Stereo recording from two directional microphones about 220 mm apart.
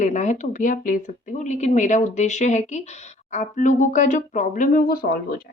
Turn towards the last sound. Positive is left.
turn(degrees=40)  # may be behind; listen again after turning